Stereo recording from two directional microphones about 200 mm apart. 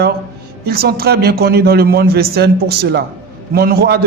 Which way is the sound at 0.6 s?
50° right (ahead or behind).